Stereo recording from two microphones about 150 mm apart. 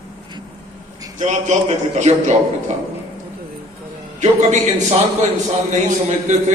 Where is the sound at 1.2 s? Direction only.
50° right (ahead or behind).